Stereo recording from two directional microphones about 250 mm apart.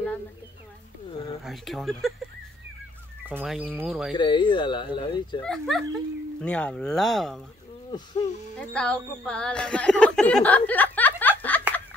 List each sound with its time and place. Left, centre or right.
1.4 s speech: centre
3.3 s speech: centre
4.1 s speech: centre
5.4 s speech: centre
7.9 s speech: centre
8.5 s speech: centre